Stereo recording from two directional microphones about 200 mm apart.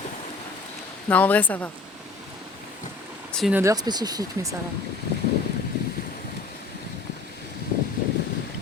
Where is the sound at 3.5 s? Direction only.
15° right (ahead or behind).